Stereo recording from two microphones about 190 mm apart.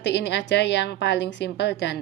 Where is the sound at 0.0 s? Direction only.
65° left (ahead or behind).